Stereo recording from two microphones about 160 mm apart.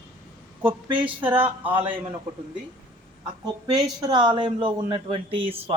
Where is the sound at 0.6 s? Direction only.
10° right (ahead or behind).